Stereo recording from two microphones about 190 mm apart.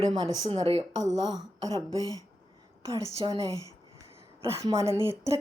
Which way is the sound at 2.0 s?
20° left (ahead or behind).